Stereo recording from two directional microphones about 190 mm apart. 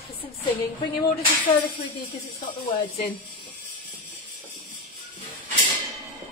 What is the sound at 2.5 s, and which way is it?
Speech, 30° left (ahead or behind).